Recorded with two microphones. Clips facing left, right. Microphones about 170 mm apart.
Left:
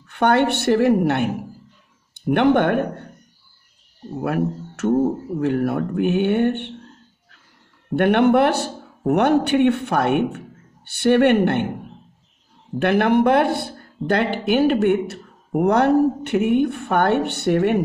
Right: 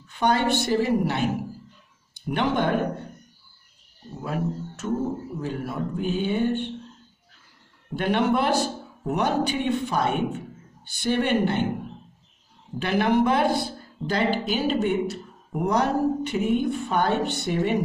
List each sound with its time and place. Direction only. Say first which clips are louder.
0.0 s speech: left 5 dB; 65° left (ahead or behind)
4.2 s speech: left 6 dB; 65° left (ahead or behind)
7.9 s speech: left 7 dB; 60° left (ahead or behind)
12.7 s speech: left 5 dB; 60° left (ahead or behind)